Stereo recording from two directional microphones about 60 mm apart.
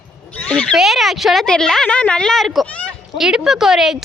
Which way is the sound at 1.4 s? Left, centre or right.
Centre.